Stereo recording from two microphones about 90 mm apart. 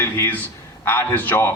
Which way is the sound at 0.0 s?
25° left (ahead or behind).